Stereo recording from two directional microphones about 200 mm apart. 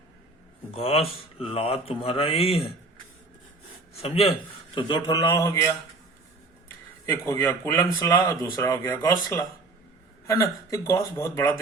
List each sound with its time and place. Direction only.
0.7 s speech: 30° left (ahead or behind)
4.0 s speech: 30° left (ahead or behind)
7.0 s a man's voice: 15° left (ahead or behind)